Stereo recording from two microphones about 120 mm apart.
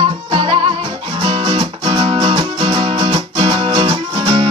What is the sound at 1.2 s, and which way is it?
Music, 45° right (ahead or behind).